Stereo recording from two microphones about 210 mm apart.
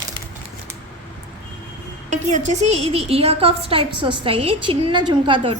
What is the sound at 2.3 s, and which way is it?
A woman's voice, 35° right (ahead or behind).